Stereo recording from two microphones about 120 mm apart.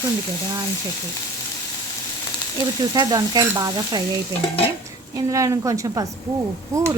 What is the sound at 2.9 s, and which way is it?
Stir, 35° right (ahead or behind).